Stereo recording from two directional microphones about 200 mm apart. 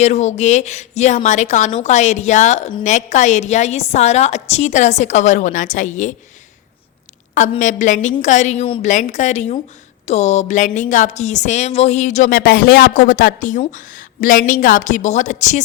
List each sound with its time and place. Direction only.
0.0 s speech: 35° left (ahead or behind)
7.6 s speech: 40° left (ahead or behind)